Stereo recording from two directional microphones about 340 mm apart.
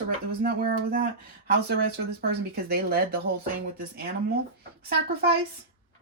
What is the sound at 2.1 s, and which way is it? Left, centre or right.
Speech, right.